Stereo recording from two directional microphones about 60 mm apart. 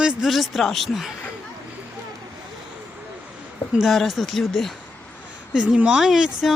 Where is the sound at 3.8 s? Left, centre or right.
Centre.